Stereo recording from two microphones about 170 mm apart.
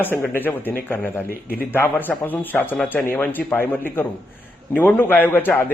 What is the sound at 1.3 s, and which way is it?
Speech, 60° left (ahead or behind).